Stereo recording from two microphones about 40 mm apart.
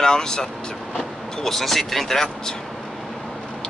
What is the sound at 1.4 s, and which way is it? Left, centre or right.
Speech, centre.